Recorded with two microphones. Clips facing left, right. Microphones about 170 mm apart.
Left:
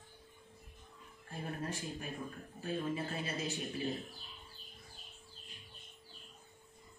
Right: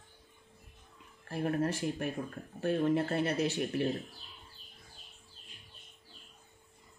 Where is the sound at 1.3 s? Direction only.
70° right (ahead or behind).